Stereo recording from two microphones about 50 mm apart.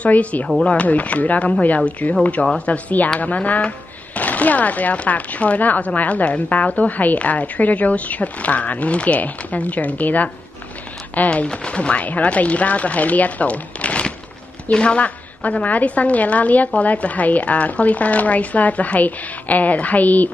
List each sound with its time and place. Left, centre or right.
0.0 s speech: left
11.2 s speech: left